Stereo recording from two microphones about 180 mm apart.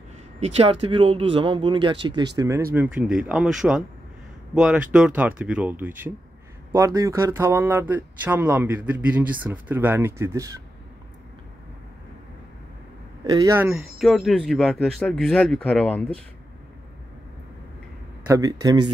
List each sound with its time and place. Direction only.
0.4 s speech: 30° right (ahead or behind)
13.2 s speech: 20° right (ahead or behind)
14.0 s speech: centre (ahead or behind)
18.3 s speech: 20° right (ahead or behind)